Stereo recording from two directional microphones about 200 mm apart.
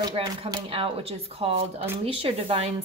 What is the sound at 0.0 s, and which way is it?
Speech, 25° right (ahead or behind).